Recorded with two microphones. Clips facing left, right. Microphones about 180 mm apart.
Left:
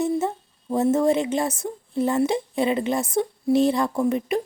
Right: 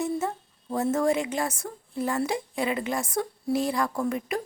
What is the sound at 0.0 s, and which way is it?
A woman's voice, 20° left (ahead or behind).